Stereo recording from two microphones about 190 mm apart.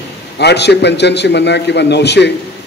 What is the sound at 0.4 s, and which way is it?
A man's voice, 60° left (ahead or behind).